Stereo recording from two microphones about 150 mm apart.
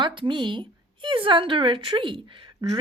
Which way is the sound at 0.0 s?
35° right (ahead or behind).